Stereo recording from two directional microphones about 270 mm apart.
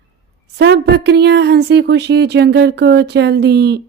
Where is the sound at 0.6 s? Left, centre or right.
Right.